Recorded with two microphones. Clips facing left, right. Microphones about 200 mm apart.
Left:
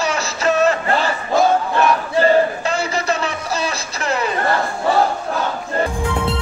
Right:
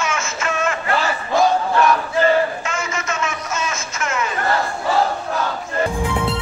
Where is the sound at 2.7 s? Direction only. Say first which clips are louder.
Left 5 dB; 35° left (ahead or behind).